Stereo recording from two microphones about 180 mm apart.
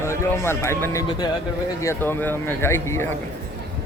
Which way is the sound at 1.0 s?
20° left (ahead or behind).